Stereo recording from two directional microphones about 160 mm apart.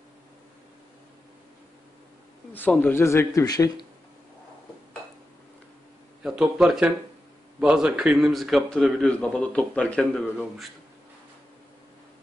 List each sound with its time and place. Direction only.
2.5 s speech: 10° left (ahead or behind)
6.2 s a man's voice: 5° right (ahead or behind)